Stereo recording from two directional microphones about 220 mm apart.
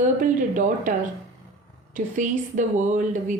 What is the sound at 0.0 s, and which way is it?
A woman's voice, 35° right (ahead or behind).